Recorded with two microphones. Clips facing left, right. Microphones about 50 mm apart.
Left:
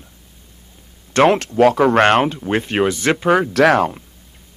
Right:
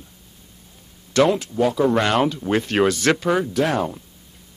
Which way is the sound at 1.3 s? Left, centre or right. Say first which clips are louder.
Left 6 dB; left.